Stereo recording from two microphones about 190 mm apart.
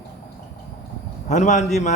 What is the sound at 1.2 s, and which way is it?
Music, 40° left (ahead or behind).